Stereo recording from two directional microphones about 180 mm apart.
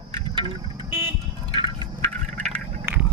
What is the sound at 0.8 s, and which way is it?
Vehicle, 10° right (ahead or behind).